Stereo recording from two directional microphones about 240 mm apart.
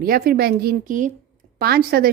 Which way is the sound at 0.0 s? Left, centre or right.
Right.